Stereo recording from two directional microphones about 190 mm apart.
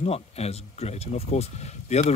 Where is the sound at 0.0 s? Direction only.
35° left (ahead or behind).